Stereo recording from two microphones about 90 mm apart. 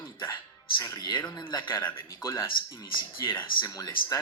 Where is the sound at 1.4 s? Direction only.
60° left (ahead or behind).